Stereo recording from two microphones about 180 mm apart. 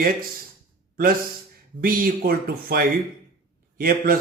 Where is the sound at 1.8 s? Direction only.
50° right (ahead or behind).